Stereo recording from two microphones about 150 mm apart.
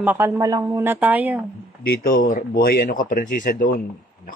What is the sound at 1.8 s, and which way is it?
Speech, 80° left.